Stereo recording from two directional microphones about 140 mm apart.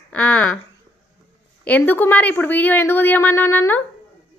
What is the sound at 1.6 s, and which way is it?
A child's voice, 10° left (ahead or behind).